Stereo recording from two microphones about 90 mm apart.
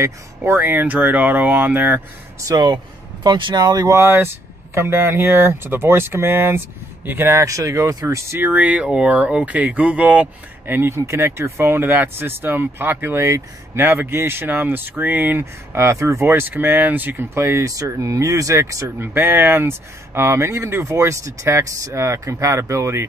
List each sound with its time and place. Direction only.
0.6 s speech: 20° right (ahead or behind)
2.4 s speech: 50° right (ahead or behind)
4.0 s speech: 25° right (ahead or behind)
8.5 s speech: 15° right (ahead or behind)
10.8 s speech: 30° right (ahead or behind)
19.1 s speech: 20° right (ahead or behind)